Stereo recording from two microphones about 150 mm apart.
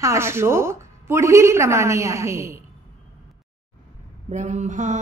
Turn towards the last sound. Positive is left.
turn(degrees=-55)  # may be behind; listen again after turning